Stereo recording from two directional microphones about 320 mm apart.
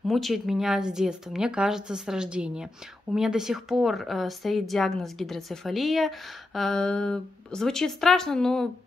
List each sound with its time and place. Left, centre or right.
0.1 s a woman's voice: centre